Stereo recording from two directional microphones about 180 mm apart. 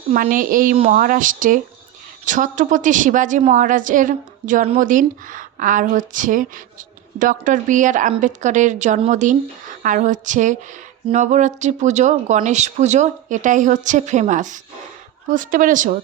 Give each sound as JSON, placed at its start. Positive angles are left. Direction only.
{"t": 0.1, "sound": "a woman's voice", "side_deg": -50}